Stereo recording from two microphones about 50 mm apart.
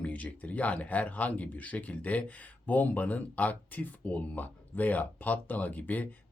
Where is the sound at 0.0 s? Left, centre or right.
Left.